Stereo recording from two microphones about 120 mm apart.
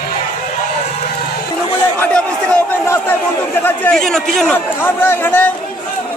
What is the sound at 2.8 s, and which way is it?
Crowd, 20° left (ahead or behind).